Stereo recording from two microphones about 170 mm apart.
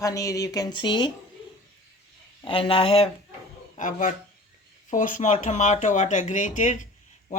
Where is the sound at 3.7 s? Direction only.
50° left (ahead or behind).